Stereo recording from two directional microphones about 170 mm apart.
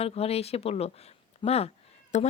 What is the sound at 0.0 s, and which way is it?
Speech, 35° left (ahead or behind).